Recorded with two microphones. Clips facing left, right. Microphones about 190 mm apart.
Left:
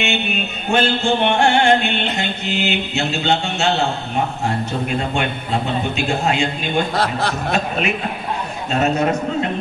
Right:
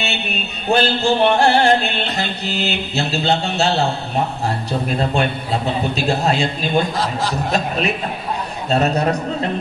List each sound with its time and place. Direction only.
0.0 s music: 35° right (ahead or behind)
4.8 s music: 35° right (ahead or behind)
6.9 s a man's voice: 65° left (ahead or behind)
8.6 s music: 35° right (ahead or behind)